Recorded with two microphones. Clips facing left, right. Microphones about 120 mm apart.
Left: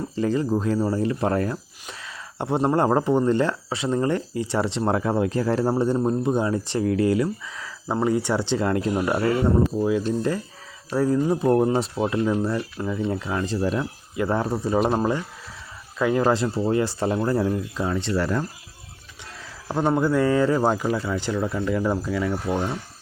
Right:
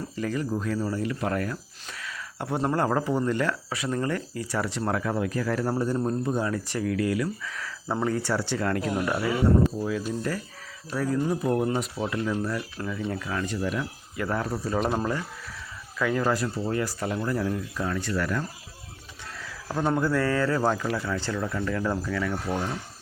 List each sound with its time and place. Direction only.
0.2 s speech: 30° left (ahead or behind)
19.6 s speech: 20° left (ahead or behind)